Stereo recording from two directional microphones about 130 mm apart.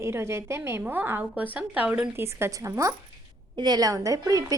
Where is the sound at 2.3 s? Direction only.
20° right (ahead or behind).